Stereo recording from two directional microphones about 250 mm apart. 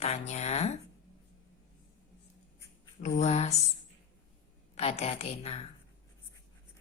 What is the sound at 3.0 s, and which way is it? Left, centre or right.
Speech, left.